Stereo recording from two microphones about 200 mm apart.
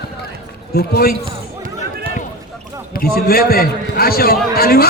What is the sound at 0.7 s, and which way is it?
Speech, 50° left (ahead or behind).